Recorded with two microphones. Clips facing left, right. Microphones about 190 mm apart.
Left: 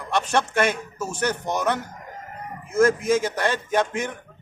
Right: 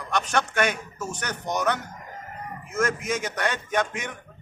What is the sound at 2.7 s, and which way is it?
A man's voice, 30° left (ahead or behind).